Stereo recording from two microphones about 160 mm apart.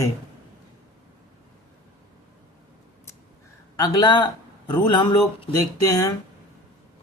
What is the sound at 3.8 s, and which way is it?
Speech, 25° left (ahead or behind).